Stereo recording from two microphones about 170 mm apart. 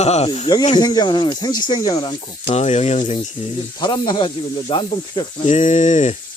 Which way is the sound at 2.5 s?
40° left (ahead or behind).